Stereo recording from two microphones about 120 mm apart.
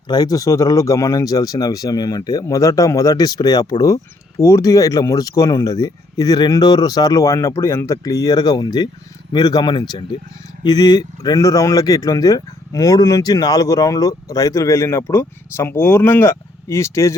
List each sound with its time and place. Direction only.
0.1 s speech: 35° left (ahead or behind)